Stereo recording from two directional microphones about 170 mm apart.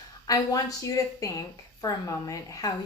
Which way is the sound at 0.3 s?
20° left (ahead or behind).